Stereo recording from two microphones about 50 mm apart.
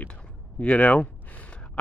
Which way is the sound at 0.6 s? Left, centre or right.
Left.